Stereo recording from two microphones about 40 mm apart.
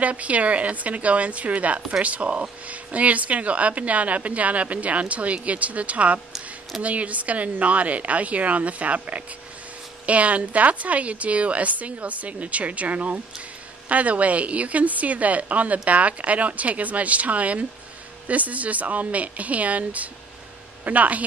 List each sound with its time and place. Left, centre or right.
0.0 s a woman's voice: right